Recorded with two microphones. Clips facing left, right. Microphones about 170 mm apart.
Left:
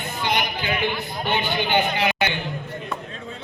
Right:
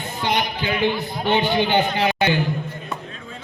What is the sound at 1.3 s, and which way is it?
A man's voice, 25° right (ahead or behind).